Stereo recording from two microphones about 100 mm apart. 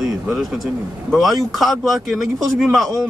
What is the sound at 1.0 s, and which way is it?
Speech, centre (ahead or behind).